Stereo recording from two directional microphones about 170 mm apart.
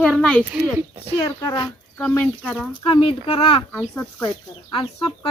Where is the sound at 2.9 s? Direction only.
35° left (ahead or behind).